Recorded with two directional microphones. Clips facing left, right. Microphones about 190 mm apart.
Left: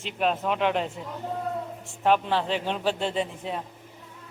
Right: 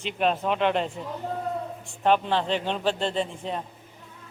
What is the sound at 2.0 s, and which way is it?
A man's voice, 5° left (ahead or behind).